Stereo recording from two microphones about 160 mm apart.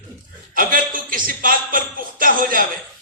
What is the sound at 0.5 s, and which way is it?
A man's voice, 60° right (ahead or behind).